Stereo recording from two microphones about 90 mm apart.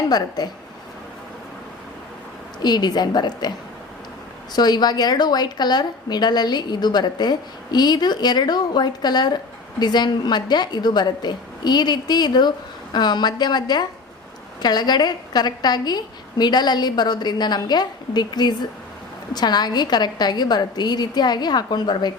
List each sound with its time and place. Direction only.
0.1 s a woman's voice: 50° left (ahead or behind)
2.6 s a woman's voice: 50° left (ahead or behind)
4.5 s a woman's voice: 50° left (ahead or behind)